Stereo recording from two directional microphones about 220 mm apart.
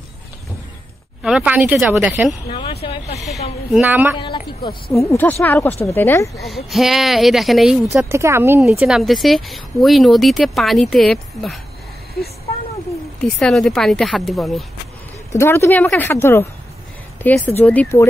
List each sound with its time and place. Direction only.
1.2 s speech: 5° right (ahead or behind)
2.5 s vehicle: 25° left (ahead or behind)
3.7 s speech: 5° right (ahead or behind)
4.2 s speech: 20° left (ahead or behind)
4.9 s speech: 10° left (ahead or behind)
6.4 s speech: centre (ahead or behind)
13.4 s speech: centre (ahead or behind)
15.3 s speech: 10° left (ahead or behind)